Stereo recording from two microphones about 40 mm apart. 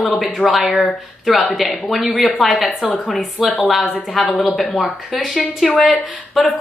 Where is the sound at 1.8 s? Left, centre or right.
Centre.